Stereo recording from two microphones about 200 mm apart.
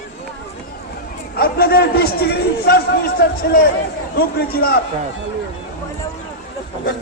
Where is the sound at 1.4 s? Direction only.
50° left (ahead or behind).